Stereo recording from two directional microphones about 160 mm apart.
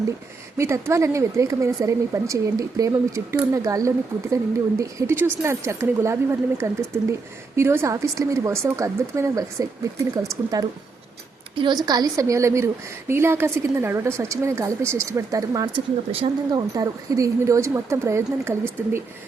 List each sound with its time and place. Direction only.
0.5 s a woman's voice: 15° right (ahead or behind)